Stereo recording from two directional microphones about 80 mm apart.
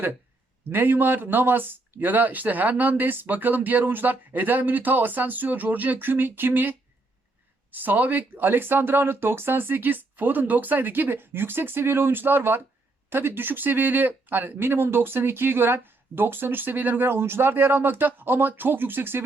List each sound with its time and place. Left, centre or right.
0.7 s speech: right